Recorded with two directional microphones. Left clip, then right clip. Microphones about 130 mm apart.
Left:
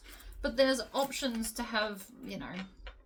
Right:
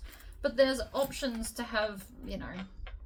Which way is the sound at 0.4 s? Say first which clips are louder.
Right 1 dB; 45° left (ahead or behind).